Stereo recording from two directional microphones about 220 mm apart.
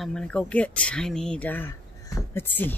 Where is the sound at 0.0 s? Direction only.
5° left (ahead or behind).